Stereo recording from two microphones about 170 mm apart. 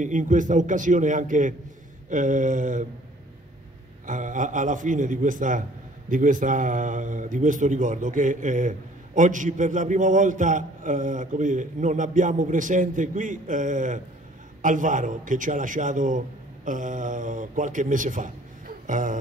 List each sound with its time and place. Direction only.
0.0 s a man's voice: 50° right (ahead or behind)
4.0 s a man's voice: 50° right (ahead or behind)